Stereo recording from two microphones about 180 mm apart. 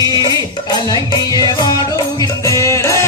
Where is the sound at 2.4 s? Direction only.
15° left (ahead or behind).